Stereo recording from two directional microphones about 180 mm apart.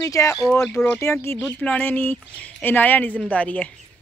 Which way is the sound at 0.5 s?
5° left (ahead or behind).